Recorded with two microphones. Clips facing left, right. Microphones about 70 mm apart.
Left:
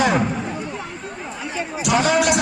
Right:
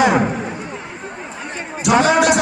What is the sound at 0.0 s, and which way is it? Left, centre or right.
Speech, right.